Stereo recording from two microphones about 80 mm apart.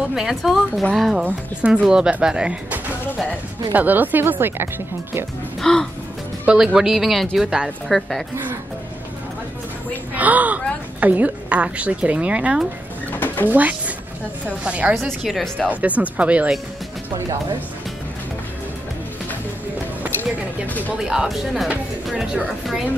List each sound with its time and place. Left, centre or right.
0.1 s a woman's voice: centre
3.7 s speech: right
5.6 s music: centre
6.4 s a woman's voice: centre
10.1 s a woman's voice: centre
13.1 s a sound: left
13.5 s a woman's voice: centre
15.2 s a woman's voice: centre
15.7 s speech: centre
20.6 s speech: left
21.0 s a woman's voice: centre